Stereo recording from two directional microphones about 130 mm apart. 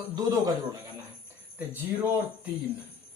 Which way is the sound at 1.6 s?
15° right (ahead or behind).